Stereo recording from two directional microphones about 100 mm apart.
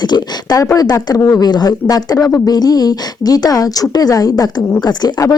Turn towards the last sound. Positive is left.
turn(degrees=40)  # may be behind; listen again after turning